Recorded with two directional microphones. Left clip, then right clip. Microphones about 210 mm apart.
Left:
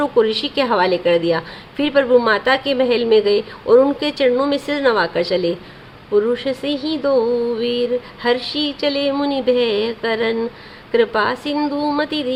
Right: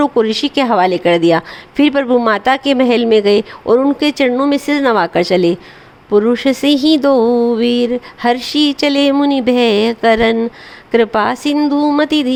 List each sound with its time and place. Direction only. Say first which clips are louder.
0.0 s a woman's voice: right 3 dB; 40° right (ahead or behind)